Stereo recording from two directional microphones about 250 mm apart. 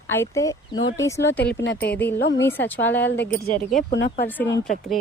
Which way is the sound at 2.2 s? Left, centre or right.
Left.